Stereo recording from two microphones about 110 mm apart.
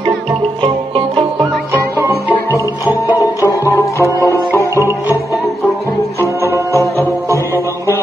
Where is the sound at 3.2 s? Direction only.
30° left (ahead or behind).